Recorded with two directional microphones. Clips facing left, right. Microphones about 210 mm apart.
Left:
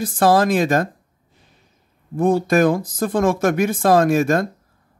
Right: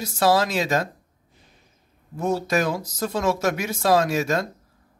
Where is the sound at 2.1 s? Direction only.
55° left (ahead or behind).